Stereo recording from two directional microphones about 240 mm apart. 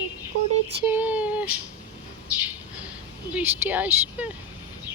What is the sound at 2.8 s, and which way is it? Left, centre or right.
Speech, centre.